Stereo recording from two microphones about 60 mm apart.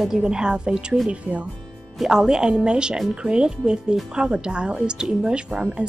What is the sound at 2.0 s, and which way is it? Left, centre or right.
A woman's voice, centre.